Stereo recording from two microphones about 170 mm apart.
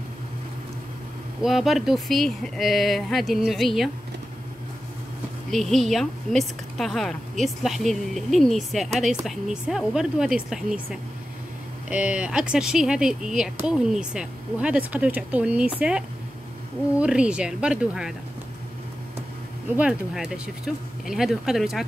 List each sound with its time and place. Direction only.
1.4 s a woman's voice: centre (ahead or behind)
5.5 s a woman's voice: centre (ahead or behind)
17.0 s a woman's voice: 5° right (ahead or behind)
19.7 s a woman's voice: 5° right (ahead or behind)